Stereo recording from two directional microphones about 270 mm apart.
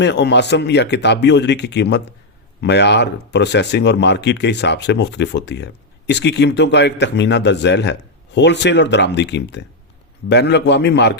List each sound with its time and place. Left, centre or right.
0.0 s speech: left